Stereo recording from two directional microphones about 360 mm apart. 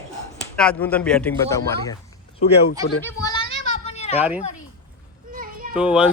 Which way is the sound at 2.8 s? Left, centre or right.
Centre.